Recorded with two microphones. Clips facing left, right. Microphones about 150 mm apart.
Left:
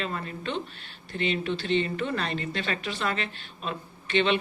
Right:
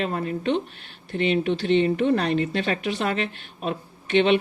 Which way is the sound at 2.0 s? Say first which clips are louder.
Right 9 dB; 55° right (ahead or behind).